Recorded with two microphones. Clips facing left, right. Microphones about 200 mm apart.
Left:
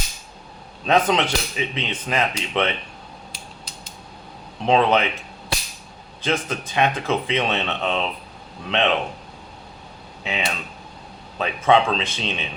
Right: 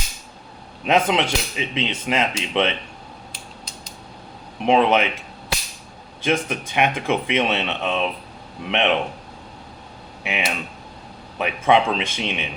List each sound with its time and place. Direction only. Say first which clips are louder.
1.0 s speech: even; 20° right (ahead or behind)
4.6 s speech: right 1 dB; 15° right (ahead or behind)
6.2 s speech: right 2 dB; 15° right (ahead or behind)
10.2 s speech: right 1 dB; 20° right (ahead or behind)